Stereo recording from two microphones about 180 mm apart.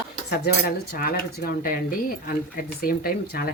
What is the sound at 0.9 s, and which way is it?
Speech, 50° left (ahead or behind).